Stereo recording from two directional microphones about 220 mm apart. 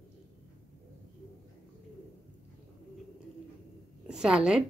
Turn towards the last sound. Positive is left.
turn(degrees=-5)  # may be behind; listen again after turning